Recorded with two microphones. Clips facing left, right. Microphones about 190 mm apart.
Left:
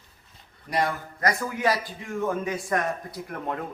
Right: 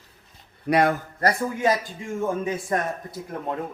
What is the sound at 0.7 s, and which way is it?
Speech, 55° right (ahead or behind).